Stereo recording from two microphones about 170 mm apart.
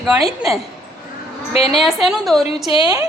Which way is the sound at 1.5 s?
35° left (ahead or behind).